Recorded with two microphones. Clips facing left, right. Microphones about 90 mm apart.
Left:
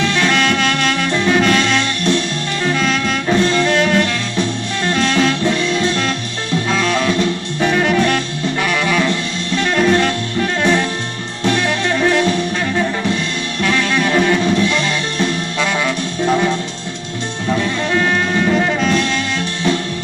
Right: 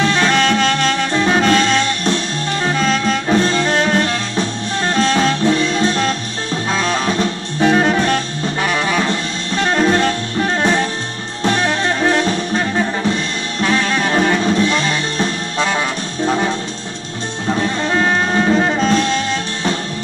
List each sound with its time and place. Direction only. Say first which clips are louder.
0.0 s music: right 1 dB; 35° right (ahead or behind)
17.6 s music: right 1 dB; 35° right (ahead or behind)